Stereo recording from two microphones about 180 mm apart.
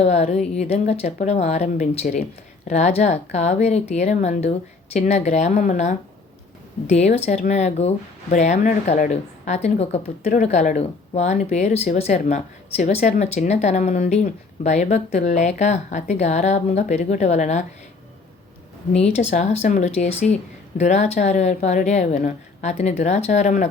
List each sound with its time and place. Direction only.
0.0 s speech: 35° left (ahead or behind)
19.0 s speech: 35° left (ahead or behind)